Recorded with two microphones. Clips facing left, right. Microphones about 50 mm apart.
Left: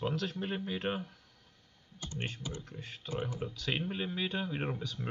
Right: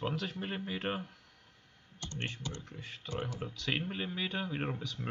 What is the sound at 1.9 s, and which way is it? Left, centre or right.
Computer keyboard, centre.